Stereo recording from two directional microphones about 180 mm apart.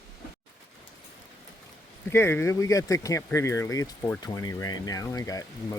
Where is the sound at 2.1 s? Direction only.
15° left (ahead or behind).